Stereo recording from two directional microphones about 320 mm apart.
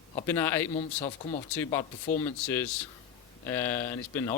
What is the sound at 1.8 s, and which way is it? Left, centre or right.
Speech, left.